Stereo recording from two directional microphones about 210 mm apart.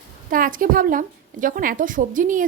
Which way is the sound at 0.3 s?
40° right (ahead or behind).